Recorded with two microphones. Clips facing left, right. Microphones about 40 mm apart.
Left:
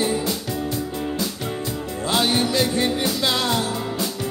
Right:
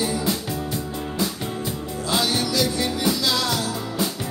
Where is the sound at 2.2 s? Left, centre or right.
Left.